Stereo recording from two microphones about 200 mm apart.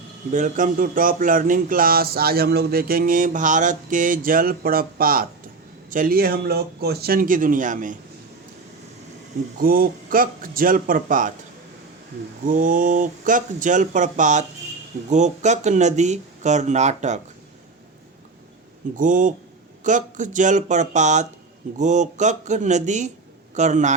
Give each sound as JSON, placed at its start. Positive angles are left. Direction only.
{"t": 0.3, "sound": "speech", "side_deg": -40}
{"t": 9.6, "sound": "speech", "side_deg": -45}
{"t": 12.4, "sound": "speech", "side_deg": -40}
{"t": 18.9, "sound": "speech", "side_deg": -40}